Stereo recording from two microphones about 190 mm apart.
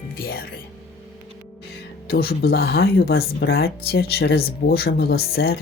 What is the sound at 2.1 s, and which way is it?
Speech, 55° left (ahead or behind).